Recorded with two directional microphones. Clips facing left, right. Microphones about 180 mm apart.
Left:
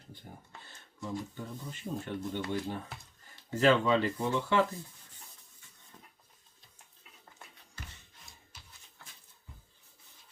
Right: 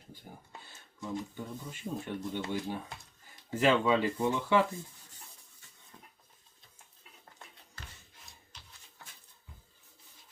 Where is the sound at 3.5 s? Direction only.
15° right (ahead or behind).